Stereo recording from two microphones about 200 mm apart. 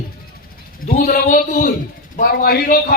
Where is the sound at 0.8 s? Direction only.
40° left (ahead or behind).